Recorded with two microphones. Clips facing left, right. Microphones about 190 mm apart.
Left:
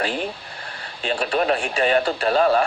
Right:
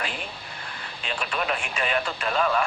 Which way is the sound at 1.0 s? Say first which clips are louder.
Left 8 dB; 35° left (ahead or behind).